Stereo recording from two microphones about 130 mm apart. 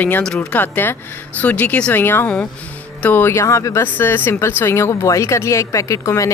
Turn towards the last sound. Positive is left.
turn(degrees=25)  # may be behind; listen again after turning